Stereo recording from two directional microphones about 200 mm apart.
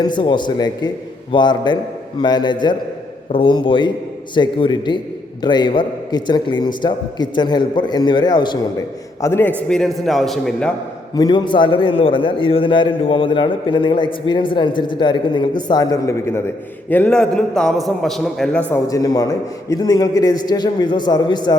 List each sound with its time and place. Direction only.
0.0 s a man's voice: 25° left (ahead or behind); by 10.7 s centre (ahead or behind)
11.1 s a man's voice: 20° left (ahead or behind); by 18.8 s 5° left (ahead or behind)
18.9 s a man's voice: 20° left (ahead or behind)